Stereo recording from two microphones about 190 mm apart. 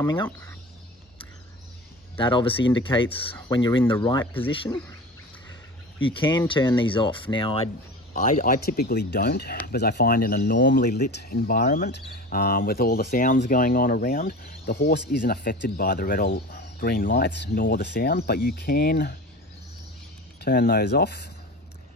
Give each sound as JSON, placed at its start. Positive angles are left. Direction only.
{"t": 0.0, "sound": "speech", "side_deg": 15}
{"t": 2.1, "sound": "speech", "side_deg": 25}
{"t": 6.0, "sound": "speech", "side_deg": 25}
{"t": 8.1, "sound": "speech", "side_deg": 40}
{"t": 20.4, "sound": "speech", "side_deg": 55}